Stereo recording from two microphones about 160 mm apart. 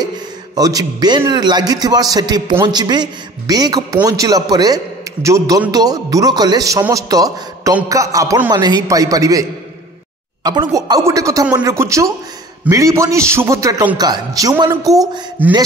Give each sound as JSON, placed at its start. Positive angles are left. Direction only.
{"t": 0.6, "sound": "a man's voice", "side_deg": -25}